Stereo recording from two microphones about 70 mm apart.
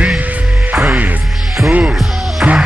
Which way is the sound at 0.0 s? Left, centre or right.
Centre.